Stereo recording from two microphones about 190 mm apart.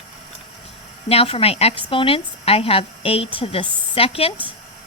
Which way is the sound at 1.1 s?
30° left (ahead or behind).